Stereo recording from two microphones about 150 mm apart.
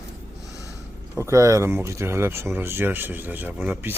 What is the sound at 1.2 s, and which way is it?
Speech, 20° right (ahead or behind).